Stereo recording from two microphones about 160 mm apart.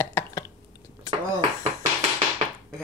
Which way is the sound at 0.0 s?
20° left (ahead or behind).